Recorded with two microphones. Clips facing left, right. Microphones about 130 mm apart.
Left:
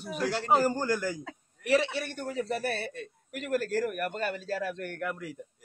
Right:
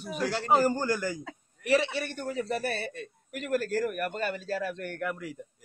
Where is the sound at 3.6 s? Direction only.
45° right (ahead or behind).